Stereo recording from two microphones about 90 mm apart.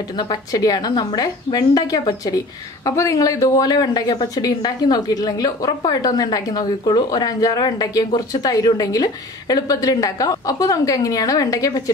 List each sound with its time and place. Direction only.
0.2 s speech: 45° left (ahead or behind)